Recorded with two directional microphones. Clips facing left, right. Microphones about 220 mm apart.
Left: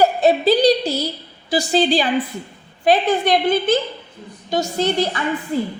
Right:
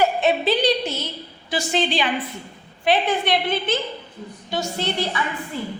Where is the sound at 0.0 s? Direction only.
40° left (ahead or behind).